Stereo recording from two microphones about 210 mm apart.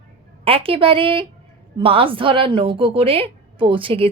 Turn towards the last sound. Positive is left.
turn(degrees=-25)  # may be behind; listen again after turning